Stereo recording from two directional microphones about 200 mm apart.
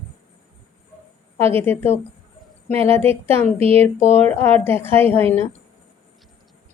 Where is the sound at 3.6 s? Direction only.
30° right (ahead or behind).